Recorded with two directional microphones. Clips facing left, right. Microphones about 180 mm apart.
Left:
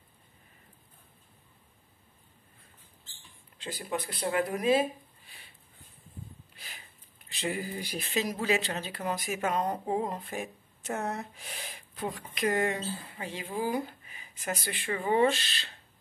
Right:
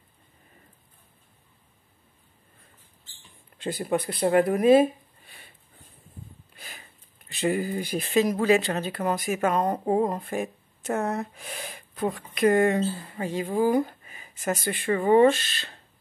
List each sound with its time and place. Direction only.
3.5 s speech: 55° right (ahead or behind)
6.5 s a sound: 50° right (ahead or behind)
7.2 s speech: 50° right (ahead or behind)